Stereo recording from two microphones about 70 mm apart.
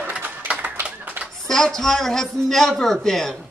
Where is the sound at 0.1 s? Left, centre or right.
Right.